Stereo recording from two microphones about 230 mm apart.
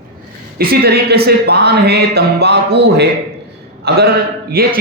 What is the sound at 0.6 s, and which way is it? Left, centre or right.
Speech, right.